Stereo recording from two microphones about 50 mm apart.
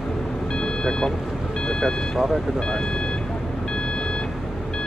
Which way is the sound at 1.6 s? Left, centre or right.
Centre.